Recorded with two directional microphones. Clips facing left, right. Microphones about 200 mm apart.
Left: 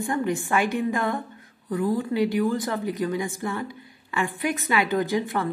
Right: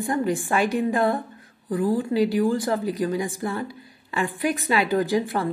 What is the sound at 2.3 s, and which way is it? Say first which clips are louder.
A woman's voice: right 2 dB; 30° right (ahead or behind).